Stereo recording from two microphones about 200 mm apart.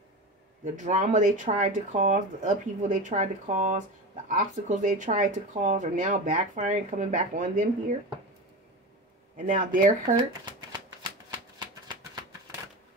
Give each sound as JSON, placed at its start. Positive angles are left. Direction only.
{"t": 0.7, "sound": "speech", "side_deg": -35}
{"t": 9.4, "sound": "speech", "side_deg": -45}
{"t": 11.0, "sound": "shuffling cards", "side_deg": -20}
{"t": 11.9, "sound": "a sound", "side_deg": -20}